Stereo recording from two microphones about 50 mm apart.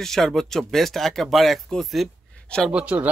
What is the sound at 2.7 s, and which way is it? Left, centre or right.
Speech, right.